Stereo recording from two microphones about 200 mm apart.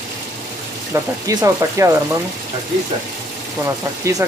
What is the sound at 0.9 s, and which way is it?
Speech, 15° right (ahead or behind).